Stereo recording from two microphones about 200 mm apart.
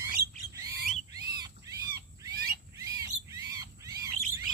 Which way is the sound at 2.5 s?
15° right (ahead or behind).